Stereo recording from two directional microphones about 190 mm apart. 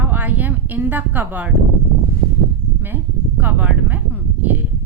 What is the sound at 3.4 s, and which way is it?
Speech, 10° right (ahead or behind).